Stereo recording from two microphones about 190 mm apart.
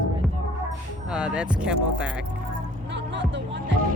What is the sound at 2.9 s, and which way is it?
Music, 70° right (ahead or behind).